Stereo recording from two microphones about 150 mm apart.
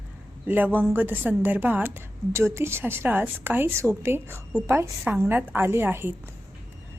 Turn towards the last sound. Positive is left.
turn(degrees=-15)  # may be behind; listen again after turning